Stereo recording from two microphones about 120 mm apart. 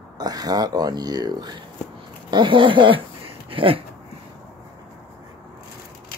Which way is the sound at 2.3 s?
45° right (ahead or behind).